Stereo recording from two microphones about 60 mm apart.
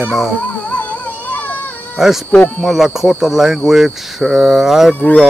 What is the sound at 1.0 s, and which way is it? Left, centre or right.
Music, left.